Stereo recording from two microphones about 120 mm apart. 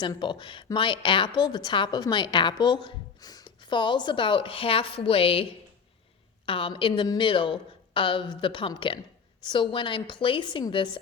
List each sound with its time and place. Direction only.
0.0 s a woman's voice: 40° left (ahead or behind)